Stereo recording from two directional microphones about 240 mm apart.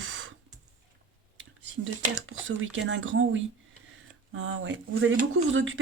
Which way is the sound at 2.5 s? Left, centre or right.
Right.